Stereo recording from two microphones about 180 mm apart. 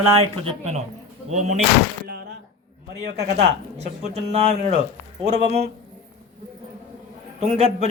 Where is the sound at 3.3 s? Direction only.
35° right (ahead or behind).